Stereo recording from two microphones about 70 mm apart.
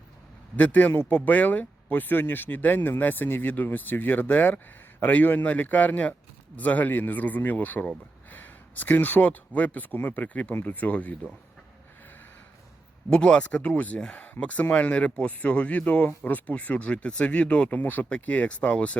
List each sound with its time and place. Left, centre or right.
0.5 s speech: left
13.1 s speech: centre